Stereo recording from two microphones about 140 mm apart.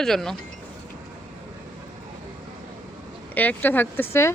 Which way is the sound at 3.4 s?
10° left (ahead or behind).